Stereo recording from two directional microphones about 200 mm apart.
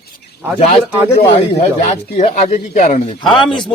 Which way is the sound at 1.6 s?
35° left (ahead or behind).